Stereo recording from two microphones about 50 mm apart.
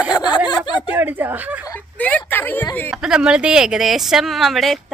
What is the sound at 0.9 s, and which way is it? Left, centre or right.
Speech, right.